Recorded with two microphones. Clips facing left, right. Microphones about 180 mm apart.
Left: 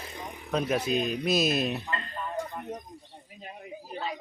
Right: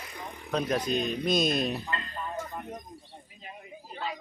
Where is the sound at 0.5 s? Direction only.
5° left (ahead or behind).